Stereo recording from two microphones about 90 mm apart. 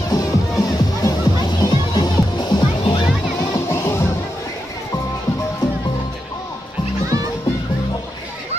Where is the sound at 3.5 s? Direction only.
30° left (ahead or behind).